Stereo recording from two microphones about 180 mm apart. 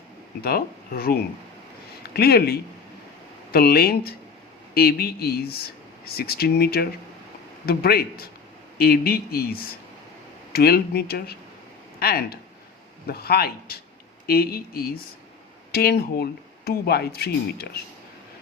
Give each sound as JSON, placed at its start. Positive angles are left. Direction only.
{"t": 0.4, "sound": "speech", "side_deg": 55}